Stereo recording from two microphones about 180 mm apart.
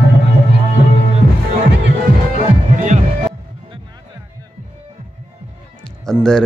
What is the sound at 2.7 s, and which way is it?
Music, 40° right (ahead or behind).